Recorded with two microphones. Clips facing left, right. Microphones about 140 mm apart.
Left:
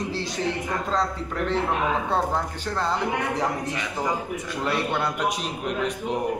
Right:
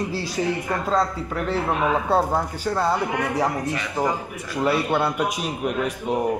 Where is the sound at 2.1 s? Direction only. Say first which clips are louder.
Right 4 dB; 10° right (ahead or behind).